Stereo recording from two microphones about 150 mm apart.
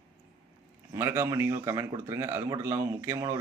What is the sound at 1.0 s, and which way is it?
Speech, 15° right (ahead or behind).